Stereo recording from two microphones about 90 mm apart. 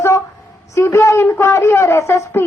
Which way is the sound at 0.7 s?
30° left (ahead or behind).